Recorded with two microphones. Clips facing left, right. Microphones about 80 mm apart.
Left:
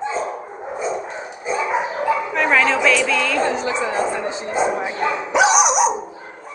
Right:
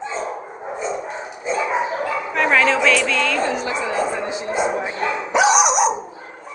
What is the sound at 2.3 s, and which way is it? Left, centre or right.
A woman's voice, centre.